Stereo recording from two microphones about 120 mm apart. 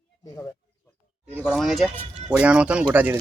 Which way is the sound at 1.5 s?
Centre (ahead or behind).